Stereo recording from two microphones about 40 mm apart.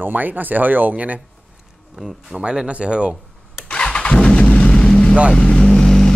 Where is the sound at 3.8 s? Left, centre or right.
Left.